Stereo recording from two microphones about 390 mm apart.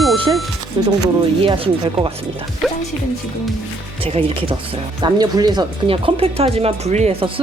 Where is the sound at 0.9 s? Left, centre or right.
Centre.